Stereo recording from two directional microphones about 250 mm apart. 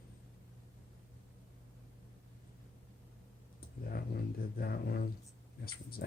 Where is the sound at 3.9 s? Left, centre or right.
Left.